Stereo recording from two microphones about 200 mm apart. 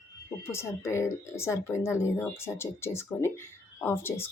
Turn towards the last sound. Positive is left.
turn(degrees=10)  # may be behind; listen again after turning